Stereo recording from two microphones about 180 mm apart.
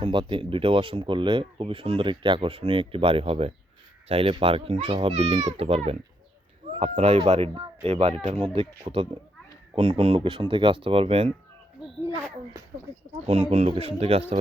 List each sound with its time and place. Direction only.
0.0 s a child's voice: 25° right (ahead or behind)
12.0 s speech: 15° right (ahead or behind)
13.1 s a child's voice: 35° right (ahead or behind)